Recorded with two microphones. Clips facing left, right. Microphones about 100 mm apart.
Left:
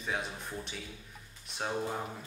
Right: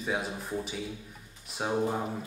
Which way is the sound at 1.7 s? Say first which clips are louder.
Right 7 dB; 20° right (ahead or behind).